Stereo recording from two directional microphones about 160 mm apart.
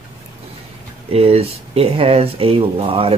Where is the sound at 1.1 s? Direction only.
40° right (ahead or behind).